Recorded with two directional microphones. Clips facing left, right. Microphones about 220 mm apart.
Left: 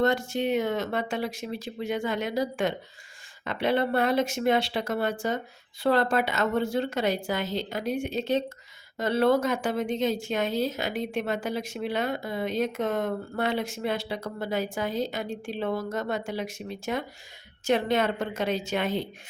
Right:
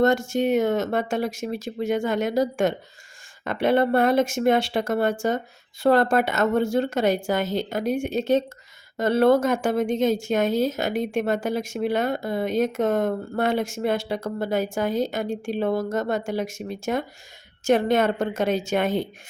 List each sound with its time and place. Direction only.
0.0 s speech: 45° right (ahead or behind)